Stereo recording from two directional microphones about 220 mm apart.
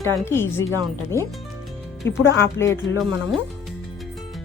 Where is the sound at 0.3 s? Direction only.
10° left (ahead or behind).